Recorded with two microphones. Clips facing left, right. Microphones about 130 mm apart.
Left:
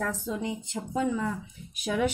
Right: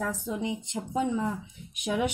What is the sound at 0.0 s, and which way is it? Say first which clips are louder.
Speech: even; 15° right (ahead or behind).